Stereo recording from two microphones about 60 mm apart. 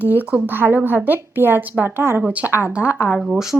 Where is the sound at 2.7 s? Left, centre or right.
Right.